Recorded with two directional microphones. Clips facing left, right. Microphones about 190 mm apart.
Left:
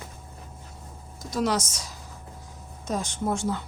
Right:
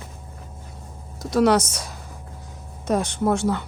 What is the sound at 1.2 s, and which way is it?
Speech, 65° right (ahead or behind).